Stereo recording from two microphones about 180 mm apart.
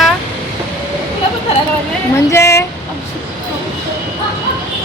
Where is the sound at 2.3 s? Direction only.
15° left (ahead or behind).